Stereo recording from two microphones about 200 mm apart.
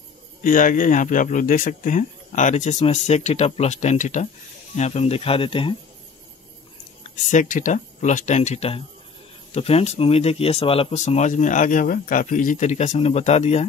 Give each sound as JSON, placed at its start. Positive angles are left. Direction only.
{"t": 0.4, "sound": "speech", "side_deg": 40}
{"t": 7.0, "sound": "speech", "side_deg": 40}